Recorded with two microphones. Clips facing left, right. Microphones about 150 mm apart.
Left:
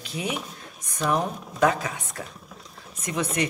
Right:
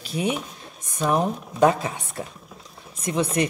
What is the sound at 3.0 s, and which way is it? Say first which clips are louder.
Speech: right 4 dB; 30° right (ahead or behind).